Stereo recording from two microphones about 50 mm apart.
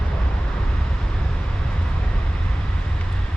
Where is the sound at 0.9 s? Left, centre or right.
Centre.